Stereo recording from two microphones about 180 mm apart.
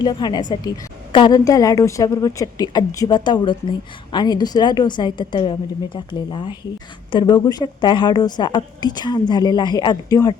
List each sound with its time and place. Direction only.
0.0 s a woman's voice: 25° left (ahead or behind)